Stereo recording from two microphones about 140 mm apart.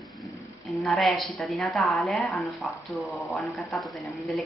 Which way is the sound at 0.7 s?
Centre (ahead or behind).